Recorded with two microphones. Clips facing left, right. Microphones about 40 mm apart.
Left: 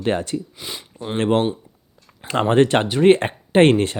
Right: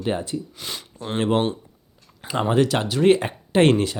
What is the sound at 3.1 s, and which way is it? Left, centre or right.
Speech, left.